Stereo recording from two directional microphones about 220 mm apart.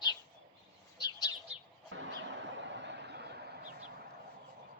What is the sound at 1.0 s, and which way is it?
Bird, 20° left (ahead or behind).